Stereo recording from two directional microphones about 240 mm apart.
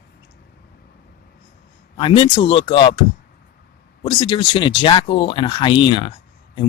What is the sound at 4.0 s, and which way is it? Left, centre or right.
Speech, left.